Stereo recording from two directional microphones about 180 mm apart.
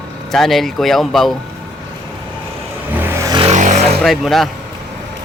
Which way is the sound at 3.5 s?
40° right (ahead or behind).